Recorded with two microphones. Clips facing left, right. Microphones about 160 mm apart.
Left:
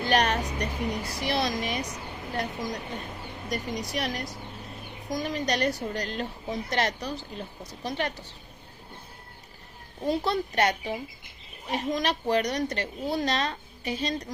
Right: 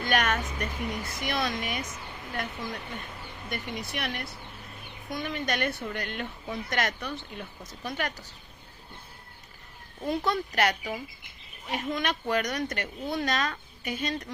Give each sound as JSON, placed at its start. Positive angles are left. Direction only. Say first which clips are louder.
{"t": 0.0, "sound": "a woman's voice", "louder": "left 3 dB", "side_deg": 35}
{"t": 10.0, "sound": "a woman's voice", "louder": "left 2 dB", "side_deg": 30}